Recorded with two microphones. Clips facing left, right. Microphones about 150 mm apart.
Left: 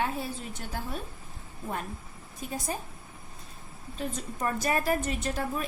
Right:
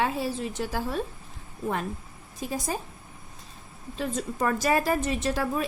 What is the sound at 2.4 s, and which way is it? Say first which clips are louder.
Speech: right 4 dB; 90° right.